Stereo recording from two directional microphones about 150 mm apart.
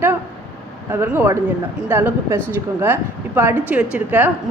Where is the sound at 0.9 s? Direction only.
15° right (ahead or behind).